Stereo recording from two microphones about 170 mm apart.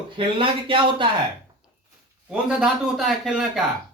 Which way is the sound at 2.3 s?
5° right (ahead or behind).